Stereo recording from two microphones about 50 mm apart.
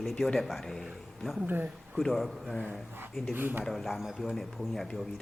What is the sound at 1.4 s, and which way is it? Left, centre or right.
Speech, right.